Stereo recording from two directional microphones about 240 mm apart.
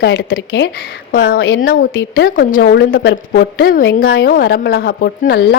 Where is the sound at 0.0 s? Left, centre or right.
Left.